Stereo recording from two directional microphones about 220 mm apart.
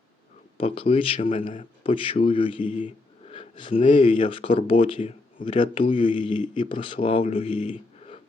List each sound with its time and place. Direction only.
0.5 s speech: 25° left (ahead or behind)